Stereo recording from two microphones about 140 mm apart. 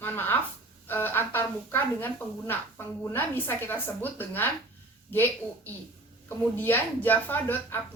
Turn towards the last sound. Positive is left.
turn(degrees=15)  # may be behind; listen again after turning